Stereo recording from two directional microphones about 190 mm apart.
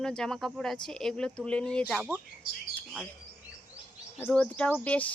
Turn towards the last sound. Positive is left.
turn(degrees=10)  # may be behind; listen again after turning